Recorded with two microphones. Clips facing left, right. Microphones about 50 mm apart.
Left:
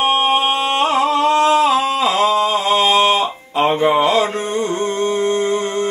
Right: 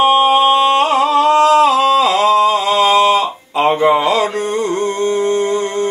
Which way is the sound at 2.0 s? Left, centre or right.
Left.